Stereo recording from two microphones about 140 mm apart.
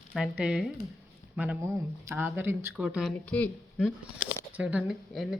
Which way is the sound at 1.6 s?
20° right (ahead or behind).